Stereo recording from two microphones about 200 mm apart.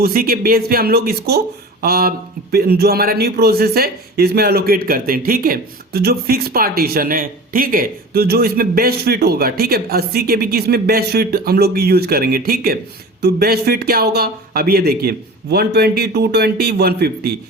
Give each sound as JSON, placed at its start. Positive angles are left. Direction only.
{"t": 0.0, "sound": "a man's voice", "side_deg": -45}